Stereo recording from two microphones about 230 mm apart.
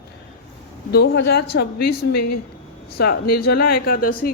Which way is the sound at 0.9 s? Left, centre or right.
Left.